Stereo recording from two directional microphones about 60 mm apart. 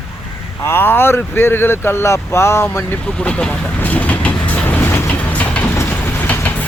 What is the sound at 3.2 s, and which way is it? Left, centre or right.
Speech, left.